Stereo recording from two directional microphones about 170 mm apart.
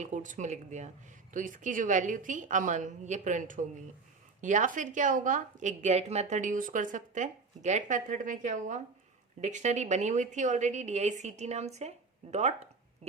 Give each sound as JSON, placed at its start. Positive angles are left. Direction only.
{"t": 0.0, "sound": "a woman's voice", "side_deg": -50}